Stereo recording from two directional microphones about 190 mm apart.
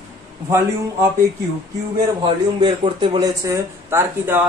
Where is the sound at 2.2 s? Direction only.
25° right (ahead or behind).